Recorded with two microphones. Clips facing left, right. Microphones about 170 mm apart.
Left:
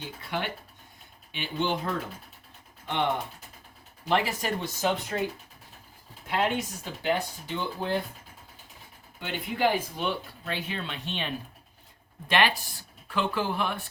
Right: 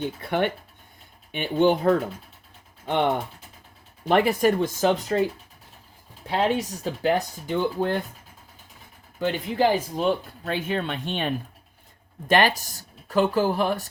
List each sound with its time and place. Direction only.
0.0 s speech: 55° right (ahead or behind)
4.1 s speech: 55° right (ahead or behind); by 5.2 s 40° right (ahead or behind)
6.2 s speech: 35° right (ahead or behind); by 7.9 s 50° right (ahead or behind)
9.1 s speech: 40° right (ahead or behind)